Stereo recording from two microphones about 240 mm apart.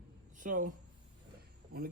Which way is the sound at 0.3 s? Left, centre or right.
Right.